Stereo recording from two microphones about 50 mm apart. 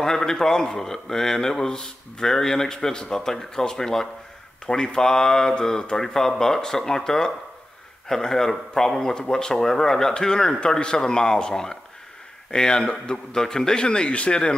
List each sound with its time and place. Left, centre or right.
0.0 s a man's voice: centre